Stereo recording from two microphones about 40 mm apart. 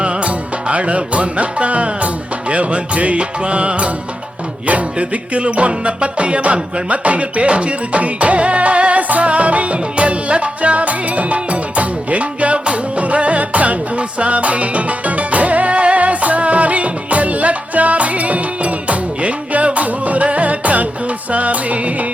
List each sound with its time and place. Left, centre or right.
0.0 s music: right